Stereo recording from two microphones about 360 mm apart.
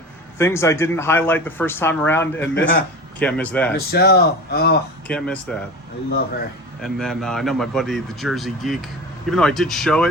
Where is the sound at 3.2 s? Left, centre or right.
Centre.